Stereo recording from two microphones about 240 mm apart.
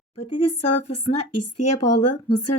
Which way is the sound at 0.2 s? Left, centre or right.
Left.